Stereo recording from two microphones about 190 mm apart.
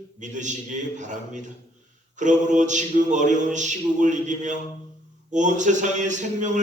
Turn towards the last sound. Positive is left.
turn(degrees=-40)  # may be behind; listen again after turning